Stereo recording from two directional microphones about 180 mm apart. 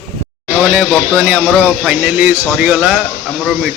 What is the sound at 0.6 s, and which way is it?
Speech, centre (ahead or behind).